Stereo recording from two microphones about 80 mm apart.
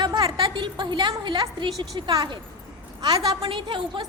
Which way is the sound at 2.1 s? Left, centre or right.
Right.